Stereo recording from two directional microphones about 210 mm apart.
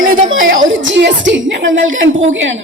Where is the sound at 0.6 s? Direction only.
60° right (ahead or behind).